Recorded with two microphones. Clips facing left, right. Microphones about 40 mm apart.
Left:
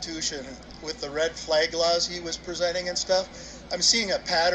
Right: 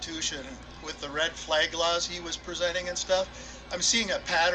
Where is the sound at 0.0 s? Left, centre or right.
Right.